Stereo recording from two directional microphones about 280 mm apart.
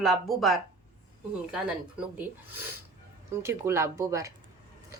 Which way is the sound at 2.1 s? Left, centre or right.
Centre.